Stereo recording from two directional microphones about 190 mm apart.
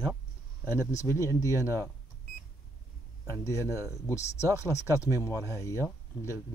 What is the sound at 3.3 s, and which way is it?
Speech, 15° left (ahead or behind).